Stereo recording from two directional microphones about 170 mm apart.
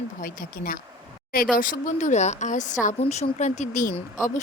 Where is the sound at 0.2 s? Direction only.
55° left (ahead or behind).